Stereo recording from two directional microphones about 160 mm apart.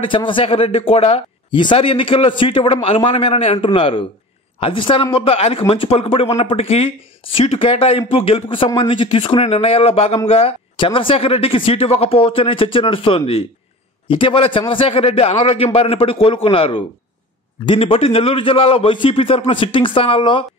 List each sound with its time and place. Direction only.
0.0 s speech: 30° left (ahead or behind)